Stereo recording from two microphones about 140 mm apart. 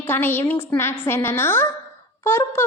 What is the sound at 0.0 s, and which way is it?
A woman's voice, 15° left (ahead or behind).